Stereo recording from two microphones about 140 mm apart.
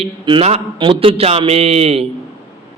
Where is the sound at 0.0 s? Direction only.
40° right (ahead or behind).